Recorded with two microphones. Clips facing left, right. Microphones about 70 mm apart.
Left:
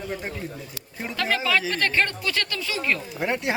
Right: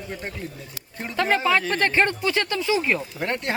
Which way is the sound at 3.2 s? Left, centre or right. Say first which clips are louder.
Left 1 dB; centre.